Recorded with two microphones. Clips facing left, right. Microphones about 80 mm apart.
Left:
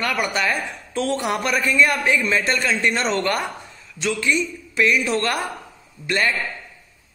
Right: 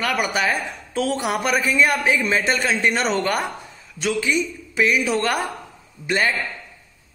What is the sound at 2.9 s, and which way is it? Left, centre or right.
A man's voice, centre.